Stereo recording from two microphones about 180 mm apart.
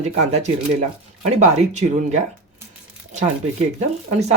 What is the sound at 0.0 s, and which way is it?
Speech, 40° right (ahead or behind).